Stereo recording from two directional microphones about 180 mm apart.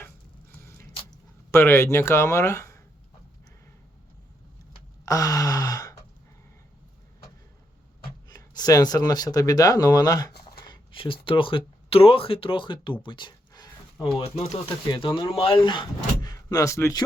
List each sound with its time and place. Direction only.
0.5 s a sound: 10° left (ahead or behind)
1.5 s speech: 15° left (ahead or behind)
5.0 s gasp: 20° left (ahead or behind)
8.3 s speech: 20° left (ahead or behind)